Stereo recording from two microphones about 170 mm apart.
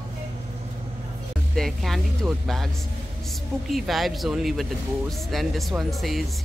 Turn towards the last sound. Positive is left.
turn(degrees=0)  # may be behind; listen again after turning